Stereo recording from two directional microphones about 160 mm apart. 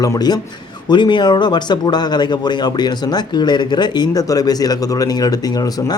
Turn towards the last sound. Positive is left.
turn(degrees=25)  # may be behind; listen again after turning